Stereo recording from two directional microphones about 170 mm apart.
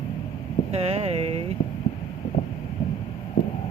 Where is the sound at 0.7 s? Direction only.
35° right (ahead or behind).